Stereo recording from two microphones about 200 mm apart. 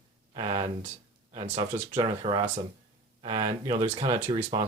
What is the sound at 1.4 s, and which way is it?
Speech, 35° right (ahead or behind).